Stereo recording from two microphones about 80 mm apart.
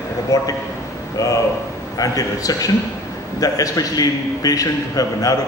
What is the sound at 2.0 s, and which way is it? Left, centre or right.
A man's voice, left.